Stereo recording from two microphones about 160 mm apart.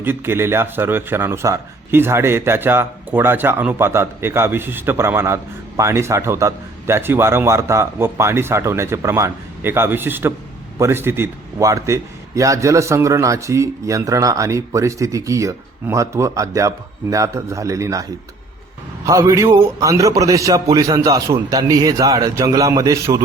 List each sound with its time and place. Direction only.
0.0 s a man's voice: 15° right (ahead or behind)
19.0 s a man's voice: 20° right (ahead or behind)